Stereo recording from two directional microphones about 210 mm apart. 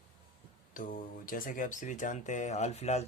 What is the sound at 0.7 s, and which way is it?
Speech, 40° left (ahead or behind).